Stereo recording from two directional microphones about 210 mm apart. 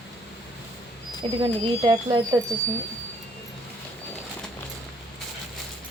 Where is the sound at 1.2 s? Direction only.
25° right (ahead or behind).